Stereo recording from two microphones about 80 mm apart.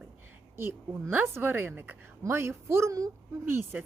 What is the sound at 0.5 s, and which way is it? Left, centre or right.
A woman's voice, right.